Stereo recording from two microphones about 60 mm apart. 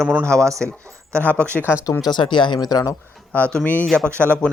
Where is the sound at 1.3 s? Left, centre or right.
Left.